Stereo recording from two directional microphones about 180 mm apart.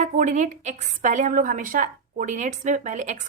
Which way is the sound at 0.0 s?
40° right (ahead or behind).